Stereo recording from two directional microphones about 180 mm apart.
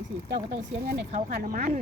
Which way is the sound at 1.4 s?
50° right (ahead or behind).